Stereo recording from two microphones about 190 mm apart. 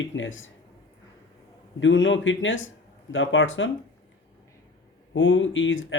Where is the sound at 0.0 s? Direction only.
85° left.